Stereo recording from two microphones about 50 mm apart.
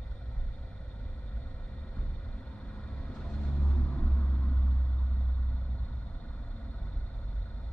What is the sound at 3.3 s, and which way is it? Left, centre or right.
Vehicle, centre.